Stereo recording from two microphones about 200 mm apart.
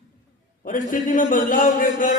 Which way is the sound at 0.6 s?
40° left (ahead or behind).